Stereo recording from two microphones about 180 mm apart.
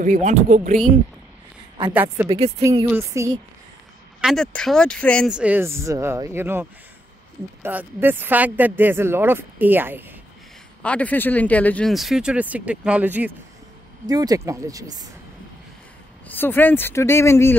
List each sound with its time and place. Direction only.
0.0 s speech: 45° right (ahead or behind)
2.2 s speech: 10° right (ahead or behind)
4.2 s speech: centre (ahead or behind)
5.3 s speech: 10° right (ahead or behind)
10.8 s speech: 5° left (ahead or behind); by 13.3 s 10° right (ahead or behind)
14.0 s speech: 20° right (ahead or behind)
16.3 s speech: 10° left (ahead or behind)